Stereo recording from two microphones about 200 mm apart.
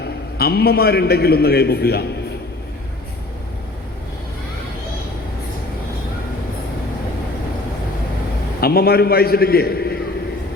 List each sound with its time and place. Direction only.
0.0 s a man's voice: 50° left (ahead or behind)
8.6 s a man's voice: 50° left (ahead or behind)